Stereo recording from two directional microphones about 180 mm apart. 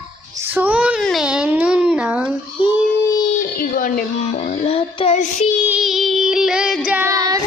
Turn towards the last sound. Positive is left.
turn(degrees=-20)  # may be behind; listen again after turning